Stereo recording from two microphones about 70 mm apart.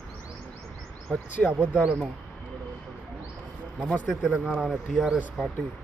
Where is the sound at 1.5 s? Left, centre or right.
Centre.